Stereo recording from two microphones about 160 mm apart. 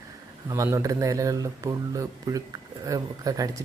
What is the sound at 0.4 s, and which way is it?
Speech, 20° right (ahead or behind).